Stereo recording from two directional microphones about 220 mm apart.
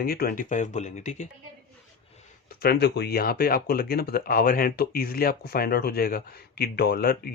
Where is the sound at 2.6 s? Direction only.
45° left (ahead or behind).